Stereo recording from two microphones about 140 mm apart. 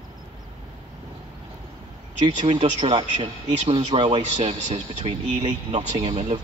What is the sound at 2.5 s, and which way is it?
Speech, 55° right (ahead or behind).